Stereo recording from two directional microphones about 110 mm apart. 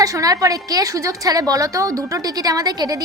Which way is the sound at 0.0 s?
30° right (ahead or behind).